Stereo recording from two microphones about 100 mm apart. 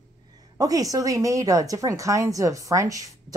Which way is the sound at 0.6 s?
35° right (ahead or behind).